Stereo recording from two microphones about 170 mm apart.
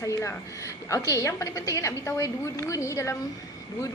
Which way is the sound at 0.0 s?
15° left (ahead or behind).